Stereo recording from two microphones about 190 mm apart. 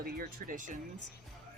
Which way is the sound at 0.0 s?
50° right (ahead or behind).